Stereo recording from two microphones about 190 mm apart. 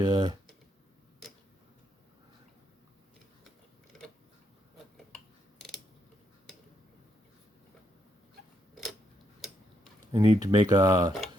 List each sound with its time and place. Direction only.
0.0 s speech: 25° right (ahead or behind)
5.1 s a sound: centre (ahead or behind)
8.7 s camera: centre (ahead or behind)
10.1 s speech: 20° right (ahead or behind)